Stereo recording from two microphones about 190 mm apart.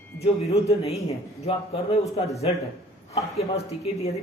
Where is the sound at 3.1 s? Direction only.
35° left (ahead or behind).